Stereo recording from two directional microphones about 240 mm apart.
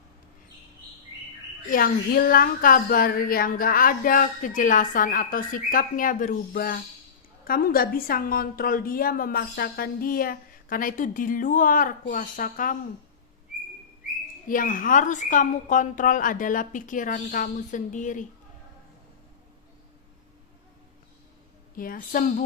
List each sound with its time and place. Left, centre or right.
1.7 s a woman's voice: left
14.4 s a woman's voice: left
21.8 s a woman's voice: left